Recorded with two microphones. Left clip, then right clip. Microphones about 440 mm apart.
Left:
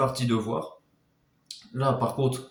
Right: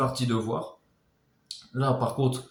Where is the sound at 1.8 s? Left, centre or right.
Left.